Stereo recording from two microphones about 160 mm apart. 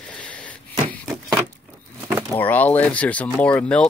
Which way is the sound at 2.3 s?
10° left (ahead or behind).